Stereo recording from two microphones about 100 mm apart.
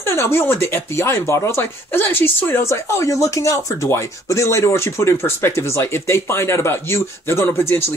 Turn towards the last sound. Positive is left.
turn(degrees=25)  # may be behind; listen again after turning